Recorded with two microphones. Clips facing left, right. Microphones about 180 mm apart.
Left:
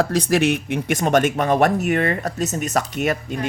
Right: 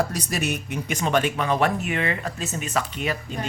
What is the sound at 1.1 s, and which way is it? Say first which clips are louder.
Speech: left 5 dB; 45° left (ahead or behind).